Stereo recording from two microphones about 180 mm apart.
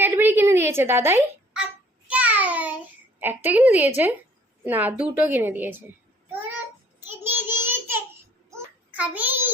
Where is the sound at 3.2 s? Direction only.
10° right (ahead or behind).